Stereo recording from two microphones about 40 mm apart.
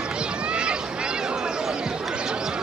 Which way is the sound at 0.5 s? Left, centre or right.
Right.